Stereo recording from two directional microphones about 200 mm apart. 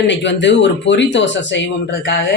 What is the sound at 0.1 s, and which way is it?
Speech, 60° left (ahead or behind).